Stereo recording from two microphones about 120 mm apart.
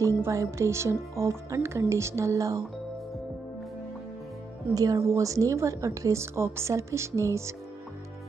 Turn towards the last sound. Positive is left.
turn(degrees=-25)  # may be behind; listen again after turning